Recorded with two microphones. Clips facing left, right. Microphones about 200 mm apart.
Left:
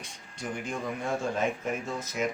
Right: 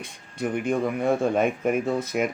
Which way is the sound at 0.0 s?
55° right (ahead or behind).